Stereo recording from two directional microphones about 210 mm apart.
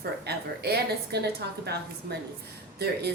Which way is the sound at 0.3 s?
50° right (ahead or behind).